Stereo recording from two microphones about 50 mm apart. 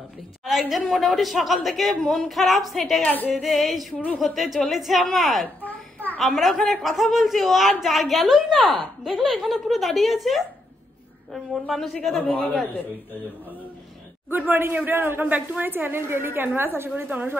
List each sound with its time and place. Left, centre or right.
0.5 s a woman's voice: centre
3.0 s speech: left
3.3 s a woman's voice: centre
5.6 s babbling: left
6.1 s a woman's voice: centre
14.3 s a woman's voice: right
17.1 s speech: right